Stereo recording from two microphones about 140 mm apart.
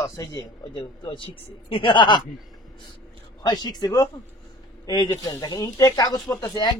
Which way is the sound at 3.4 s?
30° left (ahead or behind).